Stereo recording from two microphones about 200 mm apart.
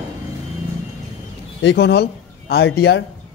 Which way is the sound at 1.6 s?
55° left (ahead or behind).